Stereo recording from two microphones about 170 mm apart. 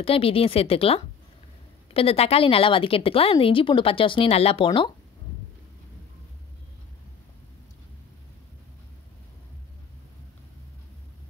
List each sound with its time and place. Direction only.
0.0 s a woman's voice: 35° left (ahead or behind)